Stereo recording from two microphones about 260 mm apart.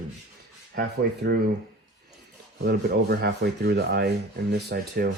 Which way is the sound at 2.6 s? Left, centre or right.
Right.